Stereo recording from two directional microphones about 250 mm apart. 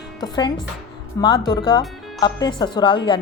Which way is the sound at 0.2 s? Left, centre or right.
Centre.